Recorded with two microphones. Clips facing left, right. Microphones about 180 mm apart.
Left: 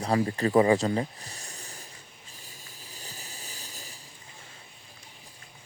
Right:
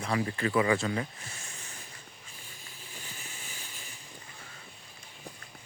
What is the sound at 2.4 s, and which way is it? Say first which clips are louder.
Vehicle: left 1 dB; 40° left (ahead or behind).